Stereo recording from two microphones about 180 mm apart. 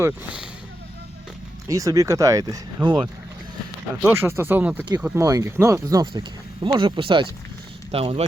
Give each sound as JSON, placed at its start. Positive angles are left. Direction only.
{"t": 1.6, "sound": "speech", "side_deg": -20}
{"t": 4.0, "sound": "speech", "side_deg": -15}